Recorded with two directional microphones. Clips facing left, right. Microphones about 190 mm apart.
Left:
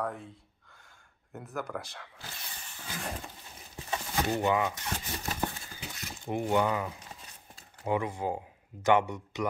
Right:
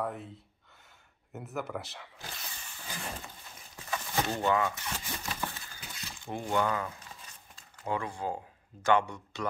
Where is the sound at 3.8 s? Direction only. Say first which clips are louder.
Left 1 dB; 15° left (ahead or behind).